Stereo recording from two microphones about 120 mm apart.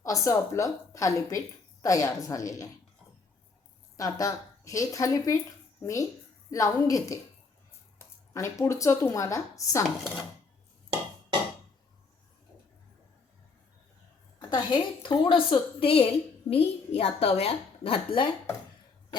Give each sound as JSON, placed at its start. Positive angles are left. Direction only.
{"t": 0.0, "sound": "speech", "side_deg": 25}
{"t": 3.9, "sound": "speech", "side_deg": 30}
{"t": 14.3, "sound": "a woman's voice", "side_deg": 35}